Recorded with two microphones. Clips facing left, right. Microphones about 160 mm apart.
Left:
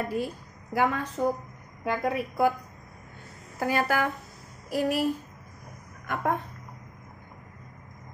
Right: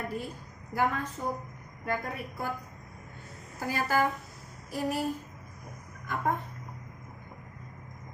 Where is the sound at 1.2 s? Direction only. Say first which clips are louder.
Left 7 dB; 90° left.